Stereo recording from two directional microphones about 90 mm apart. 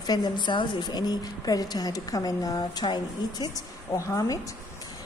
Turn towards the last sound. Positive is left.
turn(degrees=35)  # may be behind; listen again after turning